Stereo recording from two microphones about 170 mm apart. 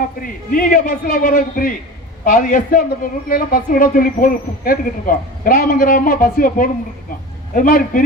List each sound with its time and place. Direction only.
0.2 s a man's voice: 55° left (ahead or behind)